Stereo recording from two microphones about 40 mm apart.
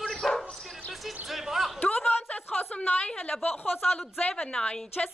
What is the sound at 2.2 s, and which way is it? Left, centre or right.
A woman's voice, left.